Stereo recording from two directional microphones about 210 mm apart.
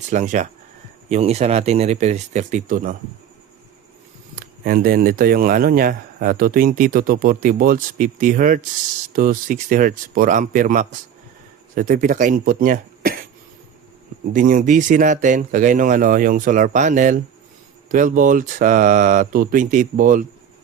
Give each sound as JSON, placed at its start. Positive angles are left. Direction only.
{"t": 0.1, "sound": "speech", "side_deg": -35}
{"t": 4.4, "sound": "speech", "side_deg": -45}
{"t": 14.3, "sound": "speech", "side_deg": -40}